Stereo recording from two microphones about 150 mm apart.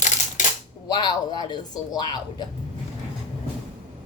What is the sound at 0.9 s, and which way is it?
Speech, 30° left (ahead or behind).